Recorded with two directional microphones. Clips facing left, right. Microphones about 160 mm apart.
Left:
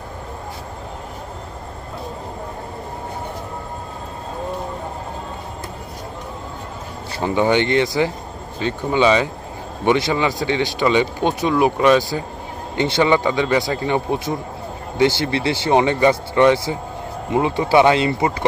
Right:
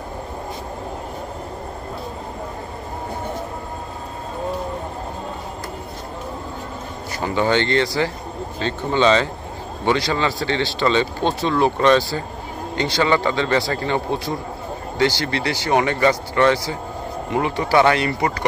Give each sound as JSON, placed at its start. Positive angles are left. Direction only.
{"t": 7.2, "sound": "speech", "side_deg": 15}